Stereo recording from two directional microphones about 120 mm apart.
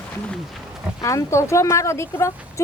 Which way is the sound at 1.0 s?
25° left (ahead or behind).